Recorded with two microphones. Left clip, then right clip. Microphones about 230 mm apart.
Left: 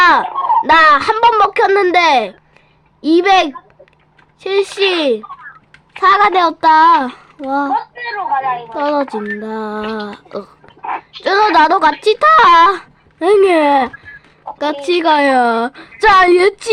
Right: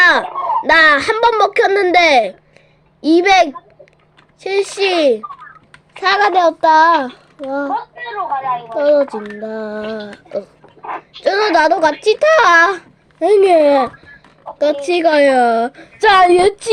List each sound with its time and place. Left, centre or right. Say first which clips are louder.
0.0 s a sound: left 1 dB; centre
0.4 s a woman's voice: left 1 dB; centre
10.2 s speech: right 3 dB; left
10.8 s a woman's voice: left 1 dB; centre